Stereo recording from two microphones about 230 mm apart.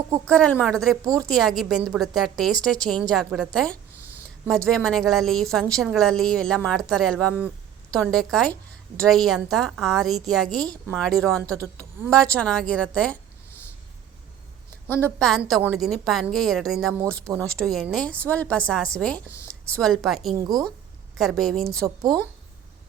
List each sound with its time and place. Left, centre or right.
0.3 s a woman's voice: centre
14.8 s a woman's voice: centre
21.8 s speech: centre